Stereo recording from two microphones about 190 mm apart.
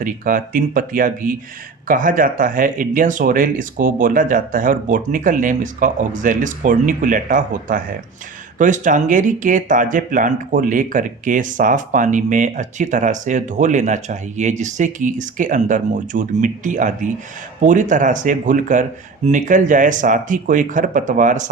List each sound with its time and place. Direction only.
0.0 s speech: 45° right (ahead or behind)